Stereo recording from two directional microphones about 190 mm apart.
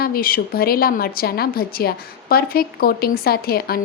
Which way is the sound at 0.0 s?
50° left (ahead or behind).